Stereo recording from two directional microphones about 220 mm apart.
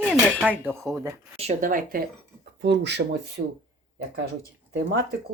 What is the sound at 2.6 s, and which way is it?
Speech, 50° right (ahead or behind).